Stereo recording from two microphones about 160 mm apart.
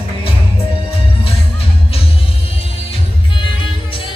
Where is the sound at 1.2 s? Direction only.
35° left (ahead or behind).